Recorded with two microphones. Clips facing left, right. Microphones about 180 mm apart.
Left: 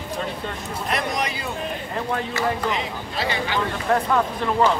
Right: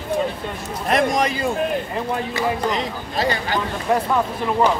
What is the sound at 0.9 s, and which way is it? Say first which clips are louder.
Speech: right 7 dB; 45° right (ahead or behind).